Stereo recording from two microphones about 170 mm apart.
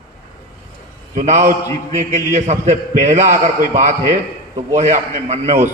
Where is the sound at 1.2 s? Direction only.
40° right (ahead or behind).